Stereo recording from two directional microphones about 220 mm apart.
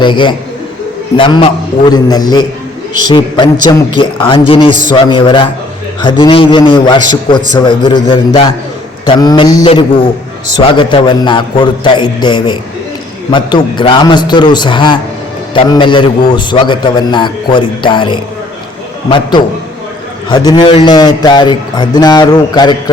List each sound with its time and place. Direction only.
0.0 s a man's voice: 20° left (ahead or behind)
20.3 s a man's voice: 20° left (ahead or behind)